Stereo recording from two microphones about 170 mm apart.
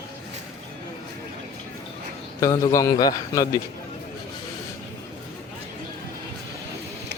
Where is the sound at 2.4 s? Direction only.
20° left (ahead or behind).